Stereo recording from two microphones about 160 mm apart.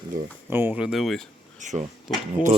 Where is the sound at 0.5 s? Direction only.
10° right (ahead or behind).